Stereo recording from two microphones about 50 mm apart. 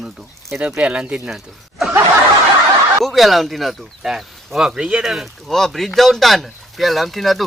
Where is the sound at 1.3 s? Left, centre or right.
Centre.